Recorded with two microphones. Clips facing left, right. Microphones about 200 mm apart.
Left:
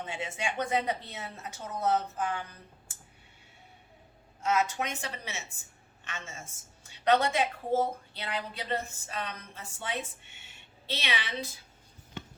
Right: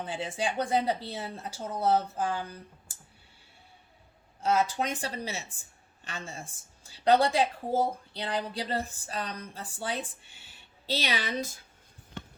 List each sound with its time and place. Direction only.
0.0 s speech: 35° right (ahead or behind)
4.4 s speech: 30° right (ahead or behind)